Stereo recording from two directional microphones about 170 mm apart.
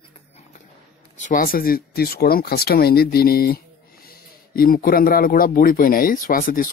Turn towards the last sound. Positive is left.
turn(degrees=55)  # may be behind; listen again after turning